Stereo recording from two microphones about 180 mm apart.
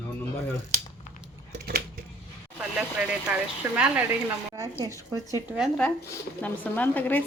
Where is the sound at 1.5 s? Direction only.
60° right (ahead or behind).